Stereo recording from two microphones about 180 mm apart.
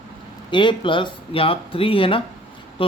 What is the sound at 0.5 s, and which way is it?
Speech, 25° left (ahead or behind).